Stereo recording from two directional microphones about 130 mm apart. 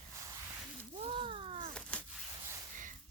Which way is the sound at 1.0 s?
50° right (ahead or behind).